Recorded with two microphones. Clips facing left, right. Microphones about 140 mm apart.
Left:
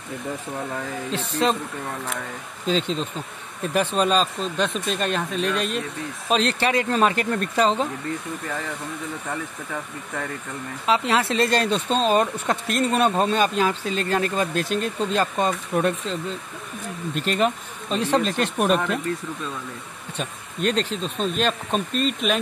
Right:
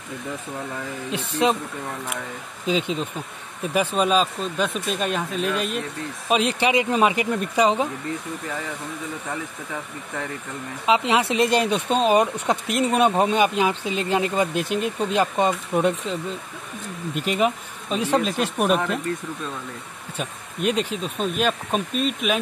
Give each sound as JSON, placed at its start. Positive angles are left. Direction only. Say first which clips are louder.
{"t": 1.1, "sound": "speech", "louder": "right 1 dB", "side_deg": -15}
{"t": 2.6, "sound": "speech", "louder": "even", "side_deg": -10}
{"t": 10.9, "sound": "speech", "louder": "right 1 dB", "side_deg": -15}
{"t": 20.2, "sound": "speech", "louder": "even", "side_deg": -10}